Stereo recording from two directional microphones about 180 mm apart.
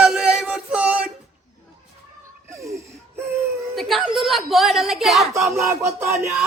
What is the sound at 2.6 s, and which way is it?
Wheeze, 15° right (ahead or behind).